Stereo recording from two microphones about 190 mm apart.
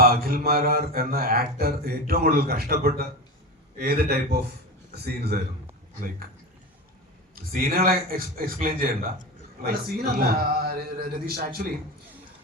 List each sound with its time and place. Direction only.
0.0 s mantra: 50° right (ahead or behind)
3.8 s a man's voice: 55° right (ahead or behind)
7.5 s mantra: 50° right (ahead or behind)